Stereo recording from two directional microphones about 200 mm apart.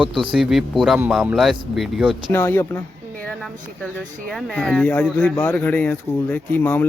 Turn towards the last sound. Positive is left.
turn(degrees=10)  # may be behind; listen again after turning